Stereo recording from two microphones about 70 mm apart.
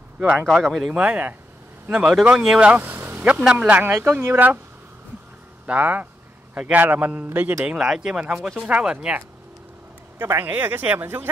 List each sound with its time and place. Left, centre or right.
0.7 s speech: centre
2.7 s speech: right
3.3 s speech: centre
5.7 s a man's voice: right
7.7 s speech: centre
10.1 s speech: right